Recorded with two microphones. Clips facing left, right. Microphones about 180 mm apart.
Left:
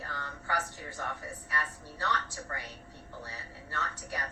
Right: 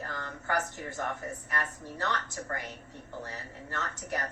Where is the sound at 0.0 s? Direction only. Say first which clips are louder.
Right 3 dB; 45° right (ahead or behind).